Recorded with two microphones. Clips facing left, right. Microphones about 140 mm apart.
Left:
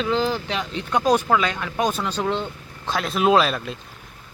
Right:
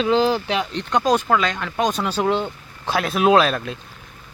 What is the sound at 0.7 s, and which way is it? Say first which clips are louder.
Speech: left 1 dB; 10° left (ahead or behind).